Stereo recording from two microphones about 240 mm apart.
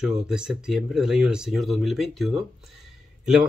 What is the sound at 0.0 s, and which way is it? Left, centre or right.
Speech, centre.